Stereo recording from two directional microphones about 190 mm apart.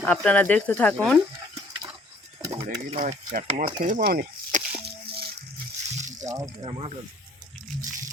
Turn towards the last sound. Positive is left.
turn(degrees=-25)  # may be behind; listen again after turning